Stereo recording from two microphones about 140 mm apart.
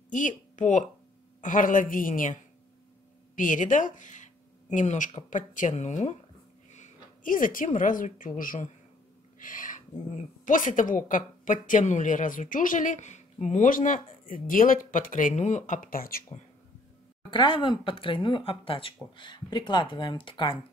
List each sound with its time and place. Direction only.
0.1 s speech: 65° left (ahead or behind)
1.4 s a woman's voice: 70° left (ahead or behind)
3.3 s speech: 65° left (ahead or behind)
6.7 s a woman's voice: 65° left (ahead or behind); by 16.2 s 90° left
17.3 s speech: 35° left (ahead or behind)